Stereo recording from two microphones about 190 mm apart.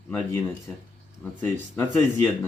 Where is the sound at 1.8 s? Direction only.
10° left (ahead or behind).